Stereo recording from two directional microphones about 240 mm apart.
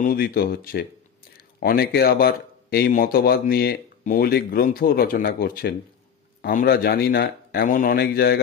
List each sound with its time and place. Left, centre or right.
0.0 s speech: left